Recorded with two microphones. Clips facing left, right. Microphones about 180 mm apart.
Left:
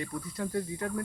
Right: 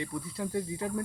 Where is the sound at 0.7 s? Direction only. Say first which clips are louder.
Even; 25° right (ahead or behind).